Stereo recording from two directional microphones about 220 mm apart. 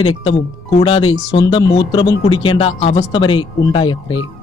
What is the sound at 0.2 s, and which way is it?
A man's voice, 25° left (ahead or behind).